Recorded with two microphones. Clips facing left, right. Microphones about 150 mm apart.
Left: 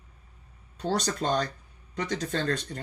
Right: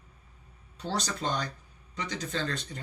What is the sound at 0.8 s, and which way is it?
Speech, 50° left (ahead or behind).